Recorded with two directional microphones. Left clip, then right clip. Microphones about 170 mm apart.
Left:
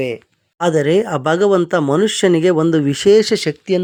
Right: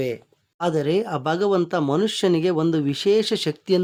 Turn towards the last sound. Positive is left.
turn(degrees=10)  # may be behind; listen again after turning